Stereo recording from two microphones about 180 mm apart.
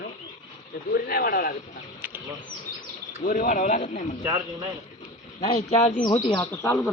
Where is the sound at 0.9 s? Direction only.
55° left (ahead or behind).